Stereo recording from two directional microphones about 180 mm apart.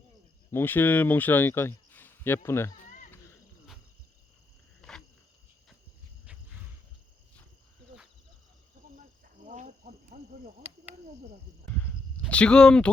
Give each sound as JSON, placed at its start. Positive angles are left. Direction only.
{"t": 0.5, "sound": "speech", "side_deg": 10}
{"t": 2.8, "sound": "a sound", "side_deg": 45}
{"t": 4.8, "sound": "cricket", "side_deg": 5}
{"t": 9.5, "sound": "cricket", "side_deg": -45}
{"t": 12.3, "sound": "speech", "side_deg": 5}